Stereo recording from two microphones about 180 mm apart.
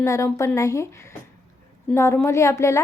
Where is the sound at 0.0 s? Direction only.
15° left (ahead or behind).